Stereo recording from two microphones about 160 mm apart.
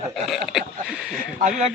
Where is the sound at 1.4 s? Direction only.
50° right (ahead or behind).